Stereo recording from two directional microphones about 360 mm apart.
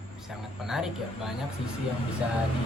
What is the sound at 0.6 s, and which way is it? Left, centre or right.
Speech, centre.